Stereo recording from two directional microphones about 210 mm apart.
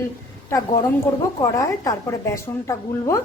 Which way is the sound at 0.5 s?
15° left (ahead or behind).